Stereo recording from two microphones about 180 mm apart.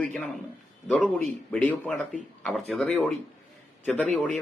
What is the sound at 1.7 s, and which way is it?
A man's voice, 5° left (ahead or behind).